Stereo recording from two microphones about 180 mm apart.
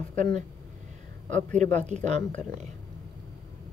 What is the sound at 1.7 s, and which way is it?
Speech, 40° right (ahead or behind).